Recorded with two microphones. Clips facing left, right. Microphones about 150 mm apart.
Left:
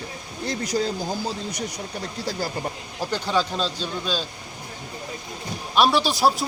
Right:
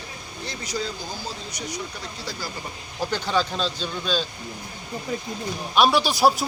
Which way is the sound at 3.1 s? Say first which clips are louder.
Left 1 dB; 5° left (ahead or behind).